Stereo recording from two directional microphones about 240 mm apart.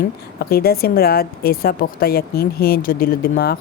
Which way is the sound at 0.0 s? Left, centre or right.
Left.